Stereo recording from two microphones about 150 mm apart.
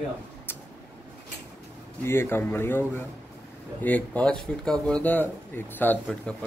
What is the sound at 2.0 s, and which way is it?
A man's voice, 15° left (ahead or behind).